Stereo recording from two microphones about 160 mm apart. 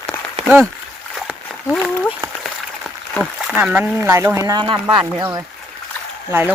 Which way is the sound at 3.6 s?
10° right (ahead or behind).